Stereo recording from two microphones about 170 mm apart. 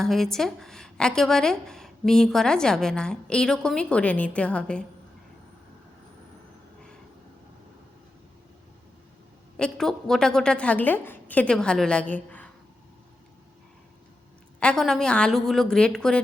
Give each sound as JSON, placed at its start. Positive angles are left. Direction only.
{"t": 0.0, "sound": "speech", "side_deg": 0}
{"t": 9.6, "sound": "speech", "side_deg": 5}
{"t": 14.6, "sound": "speech", "side_deg": 5}